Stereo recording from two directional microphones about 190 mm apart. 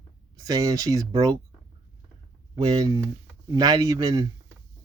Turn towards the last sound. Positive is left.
turn(degrees=-20)  # may be behind; listen again after turning